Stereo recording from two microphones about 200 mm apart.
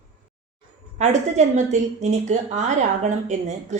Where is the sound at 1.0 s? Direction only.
35° right (ahead or behind).